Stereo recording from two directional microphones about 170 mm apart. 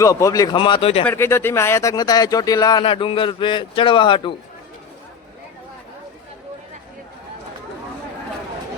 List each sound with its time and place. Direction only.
0.0 s speech: 20° left (ahead or behind); by 1.0 s 35° left (ahead or behind)
1.0 s speech: 15° left (ahead or behind); by 4.4 s 30° left (ahead or behind)